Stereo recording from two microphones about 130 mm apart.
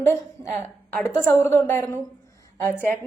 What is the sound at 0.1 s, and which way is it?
A woman's voice, 20° left (ahead or behind).